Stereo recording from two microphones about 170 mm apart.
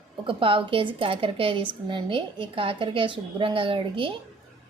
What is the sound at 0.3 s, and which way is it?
A woman's voice, 30° right (ahead or behind).